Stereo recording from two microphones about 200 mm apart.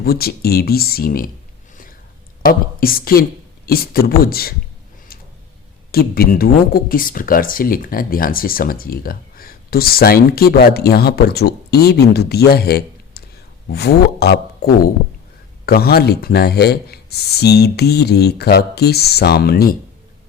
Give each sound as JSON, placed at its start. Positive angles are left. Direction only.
{"t": 0.0, "sound": "speech", "side_deg": 50}
{"t": 2.4, "sound": "speech", "side_deg": 45}
{"t": 5.9, "sound": "speech", "side_deg": 50}